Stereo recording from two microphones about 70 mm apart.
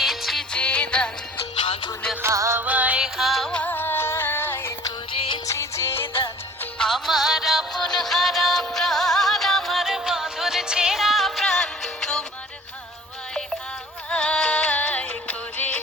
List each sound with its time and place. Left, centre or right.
0.0 s music: centre
0.5 s music: centre
2.2 s music: right
2.6 s music: right
3.0 s music: centre
3.5 s music: left
5.5 s music: left
6.7 s music: centre
14.1 s music: centre